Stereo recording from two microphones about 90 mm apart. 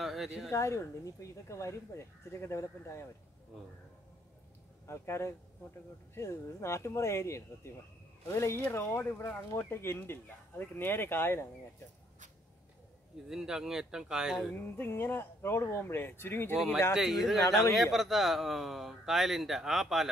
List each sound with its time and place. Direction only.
0.0 s a sound: centre (ahead or behind)
0.5 s speech: 30° left (ahead or behind)
4.8 s speech: 30° left (ahead or behind)
13.3 s speech: 5° right (ahead or behind)
14.8 s speech: 25° left (ahead or behind)
16.5 s speech: 5° right (ahead or behind)